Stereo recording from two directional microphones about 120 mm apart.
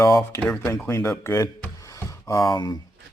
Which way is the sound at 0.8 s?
20° left (ahead or behind).